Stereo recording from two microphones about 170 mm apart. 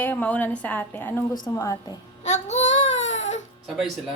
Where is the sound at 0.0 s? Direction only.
10° left (ahead or behind).